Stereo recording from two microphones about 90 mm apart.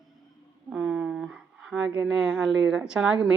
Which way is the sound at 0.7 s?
10° right (ahead or behind).